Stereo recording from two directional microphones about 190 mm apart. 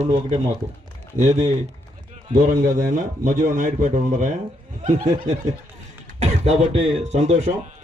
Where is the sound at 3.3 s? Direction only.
40° right (ahead or behind).